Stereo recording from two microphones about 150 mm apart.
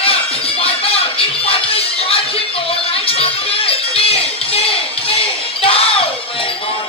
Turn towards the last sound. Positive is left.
turn(degrees=40)  # may be behind; listen again after turning